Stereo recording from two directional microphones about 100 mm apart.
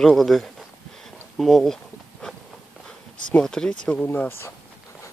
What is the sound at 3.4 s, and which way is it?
Speech, 5° left (ahead or behind).